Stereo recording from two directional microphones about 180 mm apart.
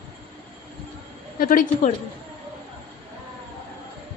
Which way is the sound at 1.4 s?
50° left (ahead or behind).